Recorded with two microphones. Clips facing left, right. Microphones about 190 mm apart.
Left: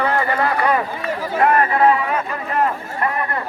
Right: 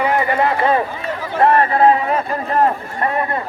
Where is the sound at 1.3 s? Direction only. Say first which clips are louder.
Right 3 dB; 30° right (ahead or behind).